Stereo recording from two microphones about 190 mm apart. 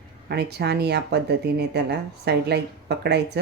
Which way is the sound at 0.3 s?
60° right (ahead or behind).